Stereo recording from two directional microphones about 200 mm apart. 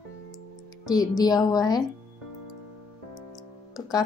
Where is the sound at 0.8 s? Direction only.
20° left (ahead or behind).